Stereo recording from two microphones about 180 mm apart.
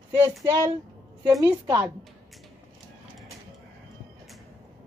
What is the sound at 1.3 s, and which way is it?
Speech, 20° right (ahead or behind).